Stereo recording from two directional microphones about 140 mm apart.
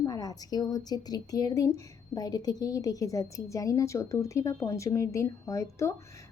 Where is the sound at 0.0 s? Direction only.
25° left (ahead or behind).